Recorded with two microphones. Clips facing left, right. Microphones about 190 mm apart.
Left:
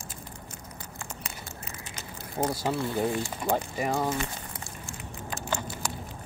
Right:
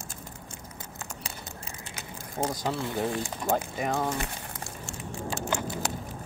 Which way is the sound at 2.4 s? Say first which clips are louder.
Left 2 dB; 5° left (ahead or behind).